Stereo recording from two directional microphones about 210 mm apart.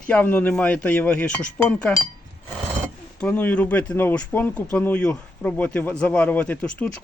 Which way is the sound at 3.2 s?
5° left (ahead or behind).